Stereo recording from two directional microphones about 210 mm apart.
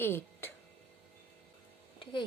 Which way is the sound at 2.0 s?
25° left (ahead or behind).